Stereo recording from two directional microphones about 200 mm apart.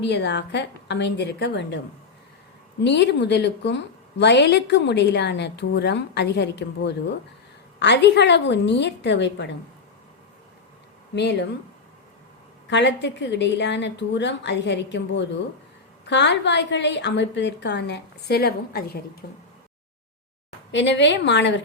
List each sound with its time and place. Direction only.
0.0 s a woman's voice: 60° left (ahead or behind)
2.8 s a woman's voice: 60° left (ahead or behind)
11.1 s a woman's voice: 60° left (ahead or behind)
12.7 s a woman's voice: 60° left (ahead or behind)
20.7 s a woman's voice: 60° left (ahead or behind)